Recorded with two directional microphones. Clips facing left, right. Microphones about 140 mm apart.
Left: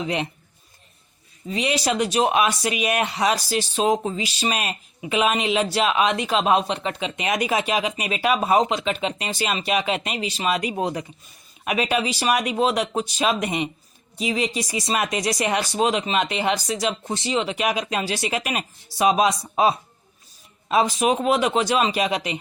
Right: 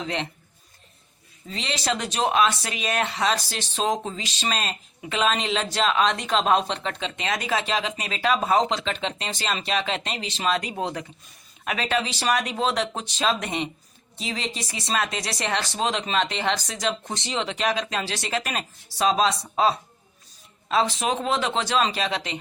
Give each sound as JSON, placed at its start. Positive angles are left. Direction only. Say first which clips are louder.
{"t": 0.0, "sound": "speech", "louder": "left 4 dB", "side_deg": 15}
{"t": 1.5, "sound": "speech", "louder": "left 5 dB", "side_deg": 15}